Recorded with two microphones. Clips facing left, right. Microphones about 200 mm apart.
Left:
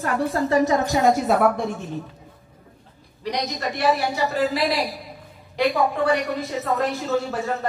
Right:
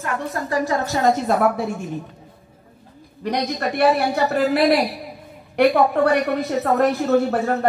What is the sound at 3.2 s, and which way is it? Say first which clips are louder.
A woman's voice: right 4 dB; 55° right (ahead or behind).